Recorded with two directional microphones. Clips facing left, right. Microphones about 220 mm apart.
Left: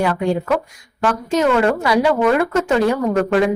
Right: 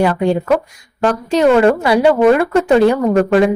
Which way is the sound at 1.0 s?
35° right (ahead or behind).